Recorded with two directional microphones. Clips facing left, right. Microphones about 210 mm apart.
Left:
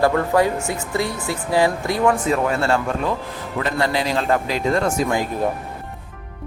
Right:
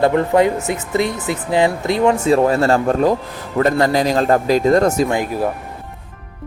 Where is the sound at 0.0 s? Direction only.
20° right (ahead or behind); by 4.9 s 40° right (ahead or behind).